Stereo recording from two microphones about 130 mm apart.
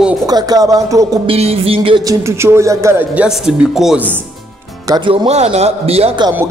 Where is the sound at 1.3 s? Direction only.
50° right (ahead or behind).